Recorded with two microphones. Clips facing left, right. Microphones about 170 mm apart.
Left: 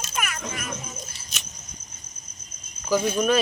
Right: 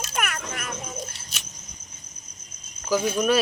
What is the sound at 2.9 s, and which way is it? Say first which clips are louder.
Speech: even; 5° right (ahead or behind).